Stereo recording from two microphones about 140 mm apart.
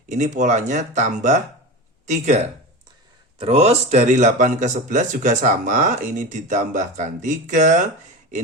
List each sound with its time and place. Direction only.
0.1 s speech: 60° right (ahead or behind)